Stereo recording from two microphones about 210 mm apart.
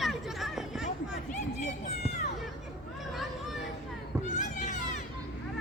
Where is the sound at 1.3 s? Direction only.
35° left (ahead or behind).